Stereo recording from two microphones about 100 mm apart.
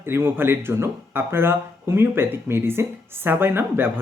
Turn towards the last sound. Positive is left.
turn(degrees=-20)  # may be behind; listen again after turning